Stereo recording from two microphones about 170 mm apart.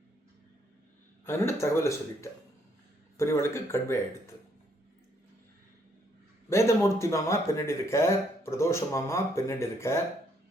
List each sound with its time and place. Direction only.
1.2 s speech: 15° left (ahead or behind)
6.5 s speech: 15° left (ahead or behind)